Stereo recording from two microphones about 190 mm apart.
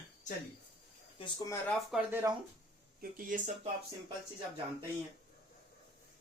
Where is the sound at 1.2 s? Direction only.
20° left (ahead or behind).